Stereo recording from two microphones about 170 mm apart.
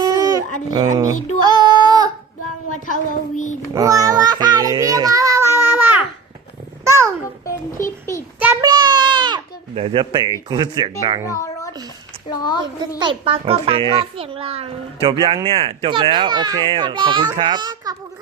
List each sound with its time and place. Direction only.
0.0 s baby cry: 20° right (ahead or behind)
0.7 s child singing: 25° right (ahead or behind)
2.7 s a child's voice: 50° left (ahead or behind)
3.8 s child singing: 20° right (ahead or behind)
6.8 s babbling: 15° right (ahead or behind)
7.4 s a sound: 15° left (ahead or behind)
8.6 s baby cry: 25° right (ahead or behind)
12.3 s a woman's voice: 25° left (ahead or behind)
13.0 s a child's voice: 30° right (ahead or behind)